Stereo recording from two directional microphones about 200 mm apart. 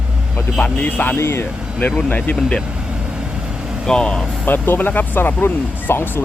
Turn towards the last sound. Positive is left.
turn(degrees=10)  # may be behind; listen again after turning